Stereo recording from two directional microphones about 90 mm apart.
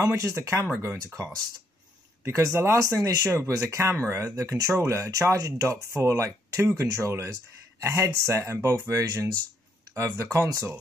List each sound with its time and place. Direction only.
0.0 s speech: 35° right (ahead or behind)